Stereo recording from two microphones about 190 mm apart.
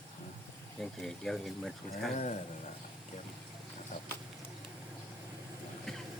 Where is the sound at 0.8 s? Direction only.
Centre (ahead or behind).